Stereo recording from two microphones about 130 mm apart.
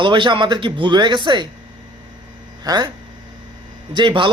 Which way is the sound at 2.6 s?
30° right (ahead or behind).